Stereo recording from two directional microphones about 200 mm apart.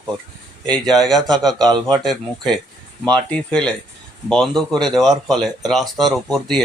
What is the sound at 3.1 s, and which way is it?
A man's voice, 5° left (ahead or behind).